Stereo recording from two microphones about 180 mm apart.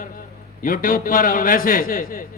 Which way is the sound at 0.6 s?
50° left (ahead or behind).